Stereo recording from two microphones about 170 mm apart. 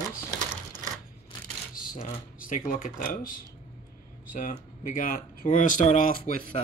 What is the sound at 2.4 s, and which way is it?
Speech, 55° left (ahead or behind).